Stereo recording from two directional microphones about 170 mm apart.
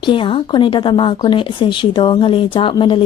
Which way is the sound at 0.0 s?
30° left (ahead or behind).